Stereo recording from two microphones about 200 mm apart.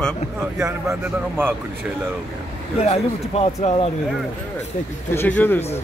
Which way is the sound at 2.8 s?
30° left (ahead or behind).